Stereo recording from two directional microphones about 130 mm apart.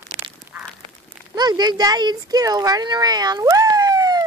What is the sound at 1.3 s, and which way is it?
Speech, 30° right (ahead or behind).